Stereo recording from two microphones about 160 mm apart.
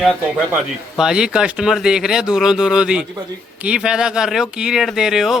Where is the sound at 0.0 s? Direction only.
5° right (ahead or behind).